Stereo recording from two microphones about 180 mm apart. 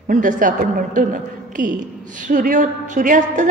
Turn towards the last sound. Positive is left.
turn(degrees=-45)  # may be behind; listen again after turning